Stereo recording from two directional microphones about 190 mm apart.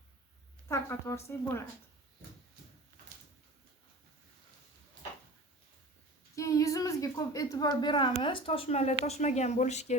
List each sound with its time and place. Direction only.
0.7 s a woman's voice: 15° left (ahead or behind)
6.3 s a woman's voice: 15° left (ahead or behind); by 9.9 s 35° left (ahead or behind)